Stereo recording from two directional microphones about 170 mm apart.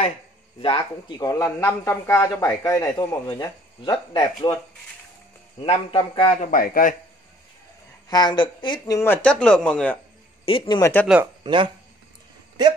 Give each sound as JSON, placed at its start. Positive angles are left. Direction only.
{"t": 0.6, "sound": "speech", "side_deg": 30}
{"t": 5.6, "sound": "a man's voice", "side_deg": 35}
{"t": 6.6, "sound": "a man's voice", "side_deg": 55}
{"t": 8.1, "sound": "speech", "side_deg": 25}
{"t": 10.4, "sound": "a man's voice", "side_deg": 30}
{"t": 10.8, "sound": "speech", "side_deg": 10}
{"t": 11.4, "sound": "speech", "side_deg": -30}